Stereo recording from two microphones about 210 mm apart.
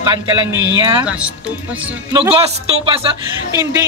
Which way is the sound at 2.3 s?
25° right (ahead or behind).